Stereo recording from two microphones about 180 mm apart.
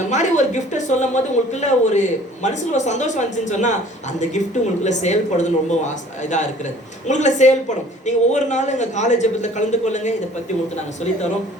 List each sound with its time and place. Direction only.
0.1 s speech: 40° left (ahead or behind)
4.8 s speech: 40° left (ahead or behind)